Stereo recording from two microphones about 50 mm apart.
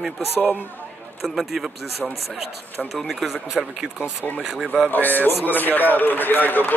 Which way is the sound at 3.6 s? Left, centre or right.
Centre.